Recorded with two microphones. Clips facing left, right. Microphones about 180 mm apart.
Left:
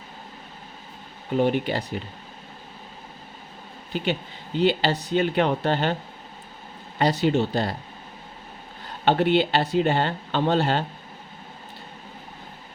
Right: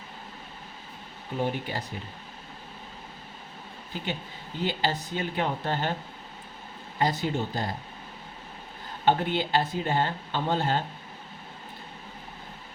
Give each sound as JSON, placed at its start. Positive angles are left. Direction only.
{"t": 1.4, "sound": "speech", "side_deg": 70}
{"t": 3.9, "sound": "speech", "side_deg": 70}
{"t": 7.0, "sound": "speech", "side_deg": 75}
{"t": 9.0, "sound": "speech", "side_deg": 75}